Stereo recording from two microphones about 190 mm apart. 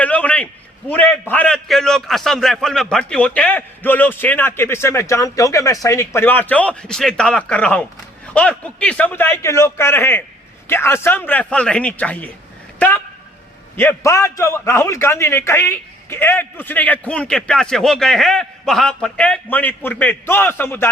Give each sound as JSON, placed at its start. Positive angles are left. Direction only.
{"t": 0.0, "sound": "a sound", "side_deg": 5}
{"t": 0.9, "sound": "a man's voice", "side_deg": 10}
{"t": 13.7, "sound": "a man's voice", "side_deg": 15}